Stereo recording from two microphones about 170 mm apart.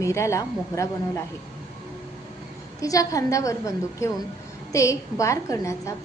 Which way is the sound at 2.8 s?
20° left (ahead or behind).